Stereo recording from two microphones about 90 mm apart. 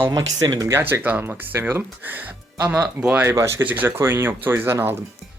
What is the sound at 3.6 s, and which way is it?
Speech, 20° right (ahead or behind).